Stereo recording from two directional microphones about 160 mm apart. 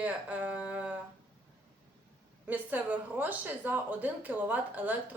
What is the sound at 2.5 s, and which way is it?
Speech, 10° right (ahead or behind).